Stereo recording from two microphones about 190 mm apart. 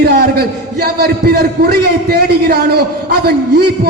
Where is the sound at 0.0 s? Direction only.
55° right (ahead or behind).